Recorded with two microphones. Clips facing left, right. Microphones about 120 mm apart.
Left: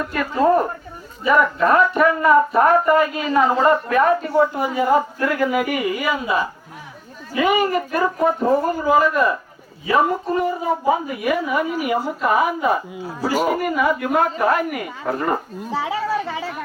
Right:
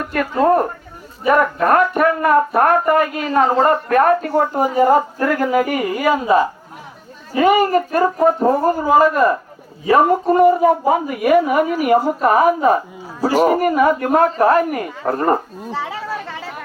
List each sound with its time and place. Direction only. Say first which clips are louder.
0.0 s speech: right 2 dB; 55° right (ahead or behind); by 9.3 s 40° right (ahead or behind)
9.9 s speech: right 5 dB; 50° right (ahead or behind)
15.7 s speech: left 3 dB; 10° left (ahead or behind)